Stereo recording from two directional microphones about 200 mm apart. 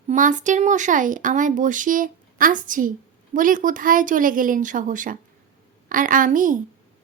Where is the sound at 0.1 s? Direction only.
40° right (ahead or behind).